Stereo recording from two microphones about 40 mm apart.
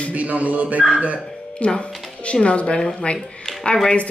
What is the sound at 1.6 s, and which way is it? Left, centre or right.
Speech, left.